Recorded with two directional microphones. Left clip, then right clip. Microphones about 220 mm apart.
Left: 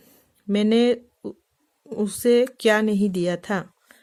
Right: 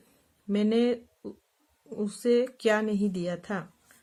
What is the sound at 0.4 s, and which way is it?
Speech, 45° left (ahead or behind).